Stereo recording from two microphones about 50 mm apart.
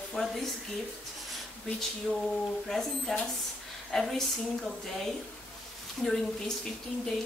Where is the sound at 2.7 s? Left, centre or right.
Centre.